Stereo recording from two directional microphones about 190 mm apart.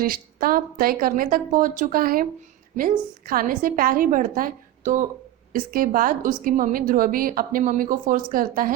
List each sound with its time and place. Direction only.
0.0 s a woman's voice: 50° right (ahead or behind)
3.2 s a woman's voice: 45° right (ahead or behind)